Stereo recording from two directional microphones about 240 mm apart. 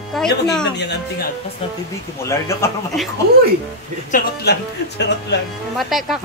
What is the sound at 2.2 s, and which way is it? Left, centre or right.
Speech, centre.